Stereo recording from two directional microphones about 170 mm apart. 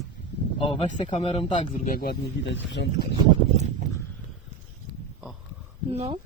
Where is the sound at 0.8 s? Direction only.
35° left (ahead or behind).